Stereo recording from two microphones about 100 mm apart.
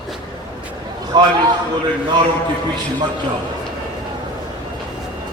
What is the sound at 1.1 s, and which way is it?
Speech, 45° right (ahead or behind).